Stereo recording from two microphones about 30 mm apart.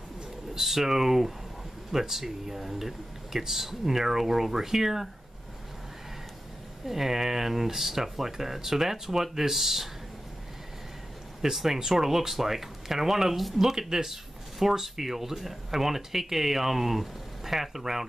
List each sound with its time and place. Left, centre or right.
0.6 s speech: centre
6.9 s speech: centre
11.5 s speech: centre
13.6 s speech: centre